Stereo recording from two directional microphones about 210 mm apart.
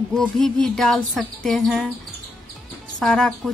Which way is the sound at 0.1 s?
5° left (ahead or behind).